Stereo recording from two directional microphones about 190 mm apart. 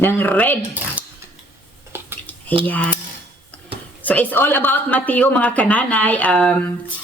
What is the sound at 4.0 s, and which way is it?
Speech, 10° left (ahead or behind).